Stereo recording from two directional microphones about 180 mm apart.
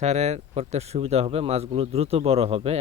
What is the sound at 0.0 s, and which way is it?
Speech, 35° right (ahead or behind).